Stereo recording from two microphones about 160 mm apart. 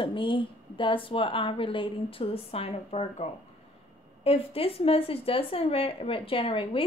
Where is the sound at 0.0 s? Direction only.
30° left (ahead or behind).